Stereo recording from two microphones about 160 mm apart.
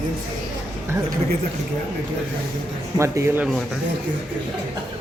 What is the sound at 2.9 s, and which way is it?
Speech, 20° right (ahead or behind).